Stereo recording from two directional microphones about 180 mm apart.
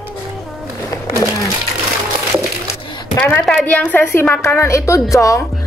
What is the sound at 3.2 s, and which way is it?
A woman's voice, 5° left (ahead or behind).